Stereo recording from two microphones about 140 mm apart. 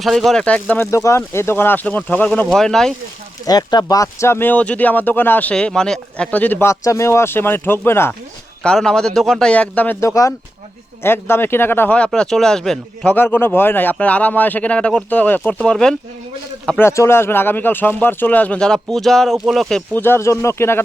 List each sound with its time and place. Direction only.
0.0 s speech: centre (ahead or behind)
3.4 s speech: 30° left (ahead or behind)
8.6 s speech: 5° left (ahead or behind)
13.1 s speech: 15° left (ahead or behind)
20.0 s speech: 15° left (ahead or behind)